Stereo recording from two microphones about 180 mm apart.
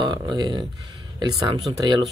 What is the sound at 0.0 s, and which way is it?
Speech, 25° right (ahead or behind).